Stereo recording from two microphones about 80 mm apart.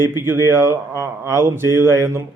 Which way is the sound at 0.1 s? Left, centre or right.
Right.